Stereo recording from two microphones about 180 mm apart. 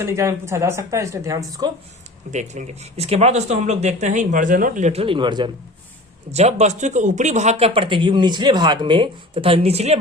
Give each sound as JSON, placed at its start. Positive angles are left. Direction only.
{"t": 0.0, "sound": "speech", "side_deg": -15}
{"t": 2.3, "sound": "speech", "side_deg": -40}
{"t": 6.3, "sound": "speech", "side_deg": -40}